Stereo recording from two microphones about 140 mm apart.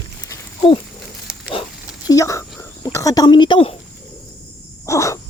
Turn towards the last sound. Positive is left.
turn(degrees=20)  # may be behind; listen again after turning